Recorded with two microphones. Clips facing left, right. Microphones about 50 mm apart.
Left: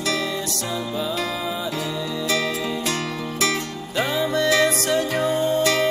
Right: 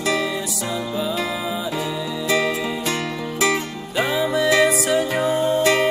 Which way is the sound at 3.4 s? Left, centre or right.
Centre.